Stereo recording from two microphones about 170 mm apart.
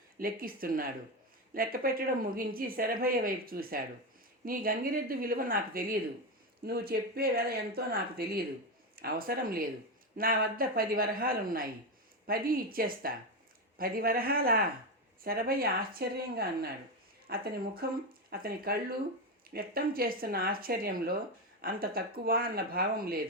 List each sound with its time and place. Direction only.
0.2 s speech: 55° right (ahead or behind)